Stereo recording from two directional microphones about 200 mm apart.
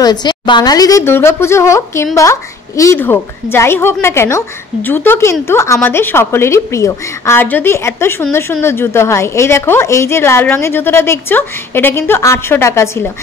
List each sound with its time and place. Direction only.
0.0 s a woman's voice: 20° left (ahead or behind)